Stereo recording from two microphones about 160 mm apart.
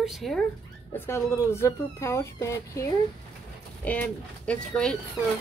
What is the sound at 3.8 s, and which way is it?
Speech, 10° left (ahead or behind).